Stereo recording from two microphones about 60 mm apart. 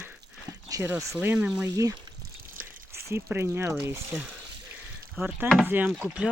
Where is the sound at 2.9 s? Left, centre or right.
Right.